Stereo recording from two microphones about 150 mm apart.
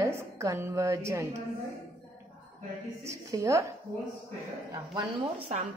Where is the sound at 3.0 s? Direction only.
20° right (ahead or behind).